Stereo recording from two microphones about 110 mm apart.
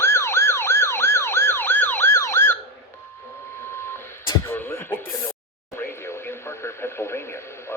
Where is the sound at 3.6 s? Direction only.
20° left (ahead or behind).